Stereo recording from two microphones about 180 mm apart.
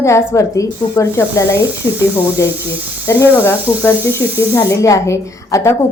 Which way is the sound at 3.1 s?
15° left (ahead or behind).